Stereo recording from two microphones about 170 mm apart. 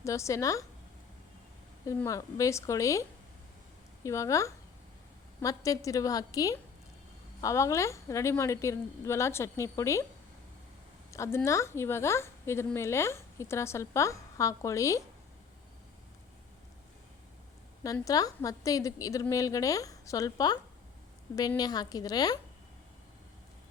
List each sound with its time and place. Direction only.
0.0 s a woman's voice: 20° left (ahead or behind)
1.9 s a woman's voice: 20° left (ahead or behind)
11.1 s a woman's voice: 15° left (ahead or behind)
17.9 s a woman's voice: 20° left (ahead or behind)